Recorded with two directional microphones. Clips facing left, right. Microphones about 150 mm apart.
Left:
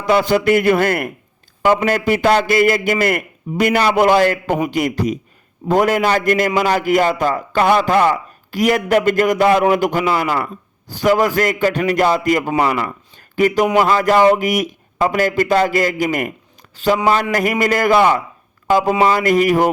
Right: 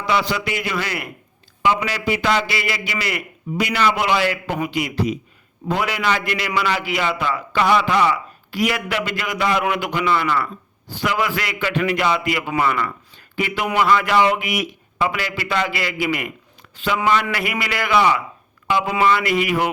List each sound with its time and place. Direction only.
0.0 s a man's voice: 50° left (ahead or behind)
12.8 s a sound: 45° left (ahead or behind)
13.7 s a man's voice: 40° left (ahead or behind)